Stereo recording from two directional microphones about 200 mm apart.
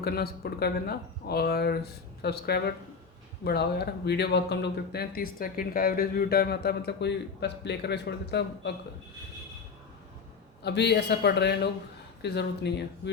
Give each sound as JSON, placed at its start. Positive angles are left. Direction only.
{"t": 0.0, "sound": "speech", "side_deg": 50}
{"t": 10.6, "sound": "a man's voice", "side_deg": 60}